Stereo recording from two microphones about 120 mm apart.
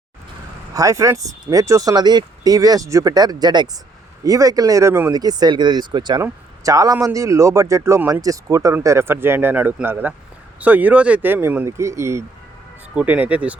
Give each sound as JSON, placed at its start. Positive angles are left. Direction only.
{"t": 0.7, "sound": "speech", "side_deg": -30}
{"t": 5.1, "sound": "speech", "side_deg": -35}
{"t": 12.9, "sound": "speech", "side_deg": -10}